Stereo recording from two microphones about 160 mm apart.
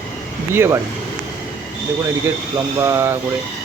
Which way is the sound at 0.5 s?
15° right (ahead or behind).